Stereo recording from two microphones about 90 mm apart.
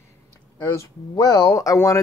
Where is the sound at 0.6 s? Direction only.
35° left (ahead or behind).